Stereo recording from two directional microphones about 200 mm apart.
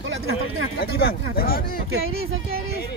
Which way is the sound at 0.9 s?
50° left (ahead or behind).